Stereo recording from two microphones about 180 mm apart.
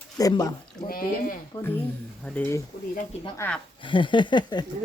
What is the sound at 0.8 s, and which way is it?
Speech, 50° left (ahead or behind).